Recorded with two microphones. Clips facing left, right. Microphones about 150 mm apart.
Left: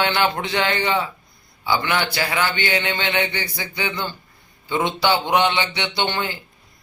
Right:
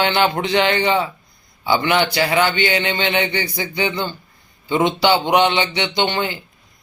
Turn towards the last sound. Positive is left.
turn(degrees=-20)  # may be behind; listen again after turning